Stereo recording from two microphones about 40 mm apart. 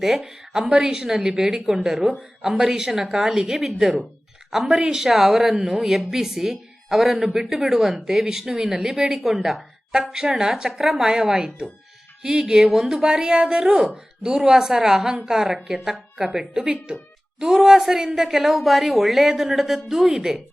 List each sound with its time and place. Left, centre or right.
0.0 s a woman's voice: centre
10.1 s speech: centre
12.6 s a woman's voice: centre
12.9 s a woman's voice: centre